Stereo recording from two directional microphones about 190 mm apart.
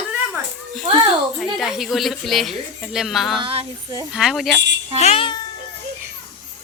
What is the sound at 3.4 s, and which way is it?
Speech, 30° right (ahead or behind).